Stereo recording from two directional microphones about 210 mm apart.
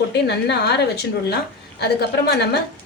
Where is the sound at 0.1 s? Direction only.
55° left (ahead or behind).